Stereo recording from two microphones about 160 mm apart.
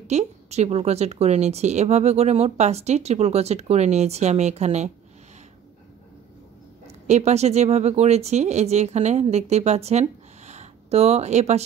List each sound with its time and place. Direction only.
0.0 s a woman's voice: 45° right (ahead or behind)
7.1 s a woman's voice: 45° right (ahead or behind)